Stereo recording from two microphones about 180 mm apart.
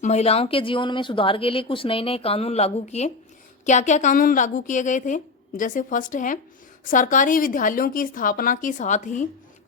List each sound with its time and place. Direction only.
0.0 s a woman's voice: 40° left (ahead or behind)